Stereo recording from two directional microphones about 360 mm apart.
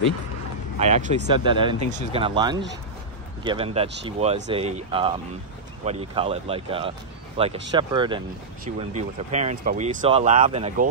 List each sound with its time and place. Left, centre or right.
0.7 s speech: centre